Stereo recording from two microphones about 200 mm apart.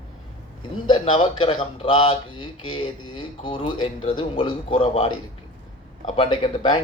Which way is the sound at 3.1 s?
25° left (ahead or behind).